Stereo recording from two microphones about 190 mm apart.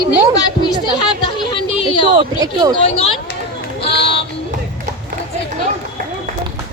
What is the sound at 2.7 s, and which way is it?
Speech, 30° left (ahead or behind).